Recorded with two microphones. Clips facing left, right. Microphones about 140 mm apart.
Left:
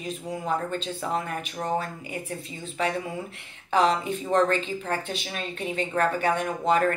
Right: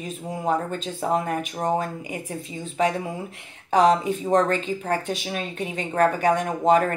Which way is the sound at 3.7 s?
40° right (ahead or behind).